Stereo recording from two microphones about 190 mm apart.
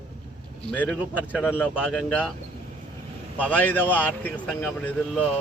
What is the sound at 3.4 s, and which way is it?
Speech, 10° left (ahead or behind).